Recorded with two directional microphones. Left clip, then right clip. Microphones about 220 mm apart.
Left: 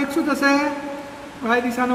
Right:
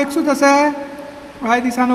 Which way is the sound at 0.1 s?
45° right (ahead or behind).